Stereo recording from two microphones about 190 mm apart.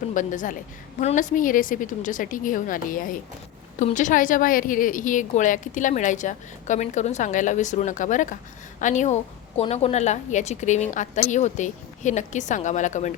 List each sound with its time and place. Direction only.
0.1 s a woman's voice: 45° left (ahead or behind)